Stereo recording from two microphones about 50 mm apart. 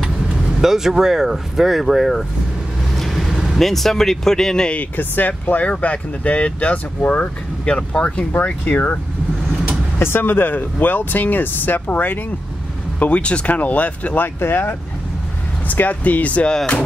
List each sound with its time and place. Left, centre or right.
0.6 s speech: centre
2.9 s vehicle: centre
3.5 s speech: centre
4.9 s speech: left
7.7 s speech: centre
8.6 s speech: left
9.9 s speech: left
13.0 s speech: left
14.2 s speech: left
15.7 s speech: left